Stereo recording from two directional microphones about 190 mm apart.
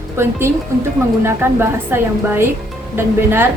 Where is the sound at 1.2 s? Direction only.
10° right (ahead or behind).